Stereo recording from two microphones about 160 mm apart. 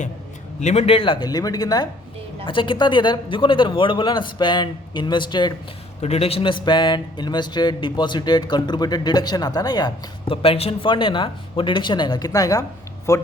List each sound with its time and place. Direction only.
0.6 s speech: 45° left (ahead or behind); by 5.5 s 30° left (ahead or behind)
6.0 s speech: 40° left (ahead or behind); by 13.2 s 20° left (ahead or behind)